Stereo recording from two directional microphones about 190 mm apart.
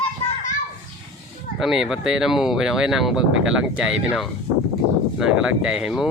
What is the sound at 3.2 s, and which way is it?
Speech, 85° right.